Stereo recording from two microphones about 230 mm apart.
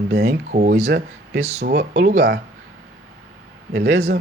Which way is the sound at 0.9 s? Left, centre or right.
Right.